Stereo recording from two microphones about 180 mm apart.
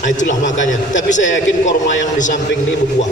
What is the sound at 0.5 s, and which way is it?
Speech, 90° left.